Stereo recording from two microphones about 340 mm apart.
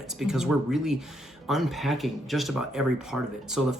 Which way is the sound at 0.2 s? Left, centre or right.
Centre.